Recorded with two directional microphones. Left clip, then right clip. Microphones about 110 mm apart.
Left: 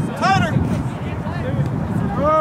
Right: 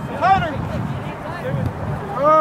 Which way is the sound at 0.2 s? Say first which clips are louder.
Right 2 dB; 45° left (ahead or behind).